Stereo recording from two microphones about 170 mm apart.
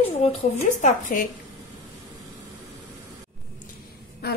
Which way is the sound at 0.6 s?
45° left (ahead or behind).